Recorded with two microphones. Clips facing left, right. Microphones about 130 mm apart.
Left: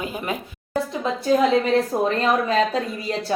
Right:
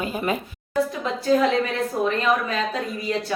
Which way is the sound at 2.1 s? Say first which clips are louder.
Left 2 dB; 35° left (ahead or behind).